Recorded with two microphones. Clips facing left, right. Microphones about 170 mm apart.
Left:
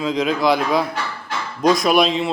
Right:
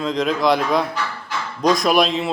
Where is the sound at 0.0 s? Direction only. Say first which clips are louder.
Even; centre (ahead or behind).